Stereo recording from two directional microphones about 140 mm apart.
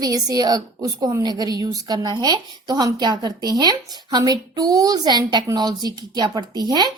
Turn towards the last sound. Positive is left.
turn(degrees=-30)  # may be behind; listen again after turning